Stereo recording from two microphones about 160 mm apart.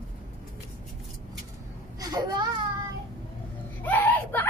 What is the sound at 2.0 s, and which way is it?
Baby cry, 25° right (ahead or behind).